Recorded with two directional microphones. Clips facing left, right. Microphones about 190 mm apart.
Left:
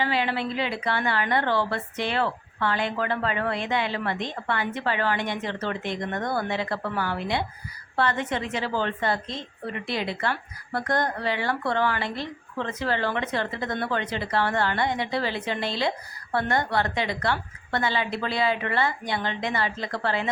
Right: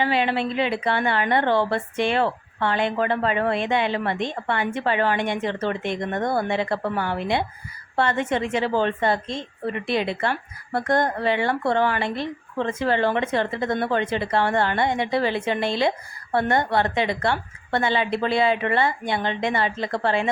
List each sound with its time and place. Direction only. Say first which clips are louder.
0.0 s a woman's voice: right 4 dB; 20° right (ahead or behind)
5.2 s speech: right 5 dB; 55° right (ahead or behind)
5.5 s a woman's voice: right 4 dB; 20° right (ahead or behind)
8.5 s a woman's voice: right 6 dB; 20° right (ahead or behind)